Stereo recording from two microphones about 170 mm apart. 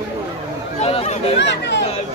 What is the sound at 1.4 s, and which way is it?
Chatter, 90° left.